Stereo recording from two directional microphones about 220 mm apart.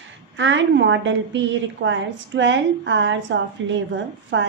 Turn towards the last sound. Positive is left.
turn(degrees=-60)  # may be behind; listen again after turning